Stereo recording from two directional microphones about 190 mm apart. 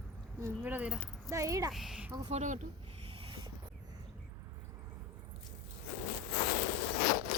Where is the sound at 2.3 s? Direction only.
40° right (ahead or behind).